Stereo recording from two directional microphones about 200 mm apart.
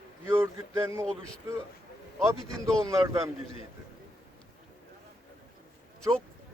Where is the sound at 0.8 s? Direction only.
15° right (ahead or behind).